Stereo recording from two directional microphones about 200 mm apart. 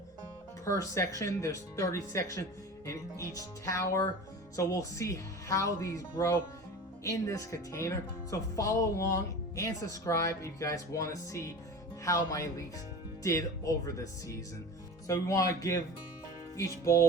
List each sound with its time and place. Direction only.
0.6 s speech: 15° left (ahead or behind)